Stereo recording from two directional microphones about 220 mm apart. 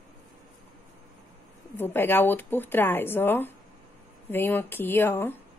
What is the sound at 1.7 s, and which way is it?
Speech, 10° left (ahead or behind).